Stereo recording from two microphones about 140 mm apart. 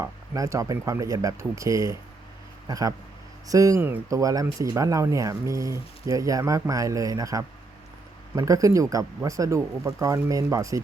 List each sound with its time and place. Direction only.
0.0 s speech: 20° right (ahead or behind)